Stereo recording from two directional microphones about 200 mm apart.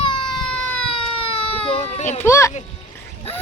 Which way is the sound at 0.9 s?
25° left (ahead or behind).